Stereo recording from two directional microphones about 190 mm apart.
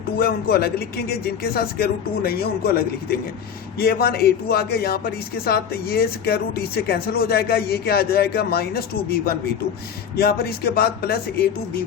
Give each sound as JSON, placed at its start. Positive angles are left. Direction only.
{"t": 0.2, "sound": "speech", "side_deg": 55}